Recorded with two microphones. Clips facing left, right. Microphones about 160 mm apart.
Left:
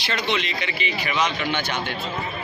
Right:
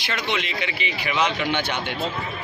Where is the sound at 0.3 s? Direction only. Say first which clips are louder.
Even; 15° right (ahead or behind).